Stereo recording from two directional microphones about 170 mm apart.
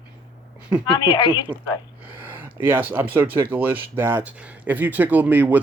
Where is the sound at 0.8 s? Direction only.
25° left (ahead or behind).